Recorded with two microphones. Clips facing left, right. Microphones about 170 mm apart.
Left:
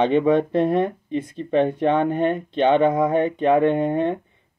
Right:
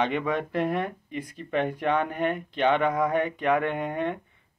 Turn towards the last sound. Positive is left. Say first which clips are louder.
# left 8 dB
turn(degrees=25)  # may be behind; listen again after turning